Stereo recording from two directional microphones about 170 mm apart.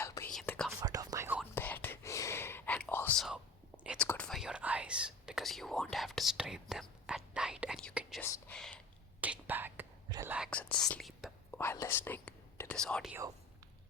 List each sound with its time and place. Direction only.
0.0 s whispering: 15° left (ahead or behind)
0.8 s whispering: 20° right (ahead or behind)
1.5 s whispering: 10° left (ahead or behind)
3.2 s whispering: 5° right (ahead or behind)
3.9 s whispering: 10° left (ahead or behind)
8.2 s whispering: 10° left (ahead or behind)
9.2 s whispering: 10° right (ahead or behind)
10.5 s whispering: 5° left (ahead or behind)
11.5 s whispering: 15° left (ahead or behind)